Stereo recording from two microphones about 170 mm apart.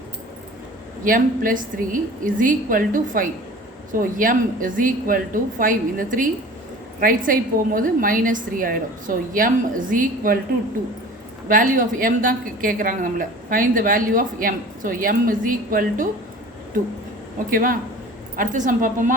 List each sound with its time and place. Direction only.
1.0 s a woman's voice: 55° right (ahead or behind)
11.4 s a woman's voice: 50° right (ahead or behind)
17.5 s a woman's voice: 55° right (ahead or behind)